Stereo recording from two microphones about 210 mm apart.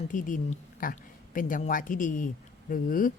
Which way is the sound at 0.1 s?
40° left (ahead or behind).